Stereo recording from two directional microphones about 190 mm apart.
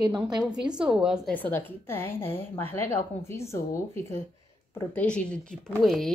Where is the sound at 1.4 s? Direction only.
10° left (ahead or behind).